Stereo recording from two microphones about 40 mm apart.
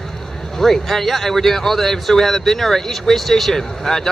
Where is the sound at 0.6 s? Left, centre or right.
Centre.